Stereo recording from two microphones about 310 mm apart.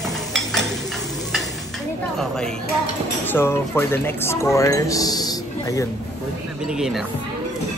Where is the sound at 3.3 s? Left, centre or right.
Centre.